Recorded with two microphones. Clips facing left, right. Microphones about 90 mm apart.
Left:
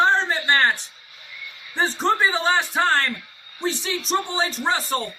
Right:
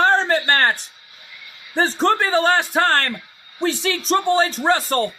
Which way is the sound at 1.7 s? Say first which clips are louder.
Right 3 dB; 65° right (ahead or behind).